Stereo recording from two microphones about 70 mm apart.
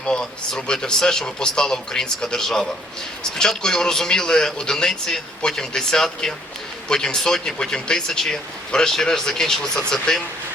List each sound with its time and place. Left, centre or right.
0.0 s speech: centre